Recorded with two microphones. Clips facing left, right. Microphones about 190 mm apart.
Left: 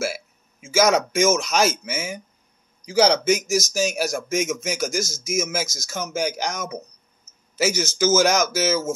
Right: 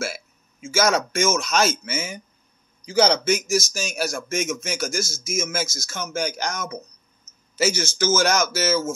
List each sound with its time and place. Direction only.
0.7 s speech: 15° left (ahead or behind)